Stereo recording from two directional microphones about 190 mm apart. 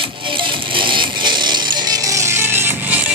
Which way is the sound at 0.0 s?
25° right (ahead or behind).